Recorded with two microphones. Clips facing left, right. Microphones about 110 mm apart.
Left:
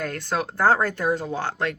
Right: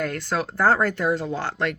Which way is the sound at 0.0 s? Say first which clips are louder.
Right 1 dB; 45° left (ahead or behind).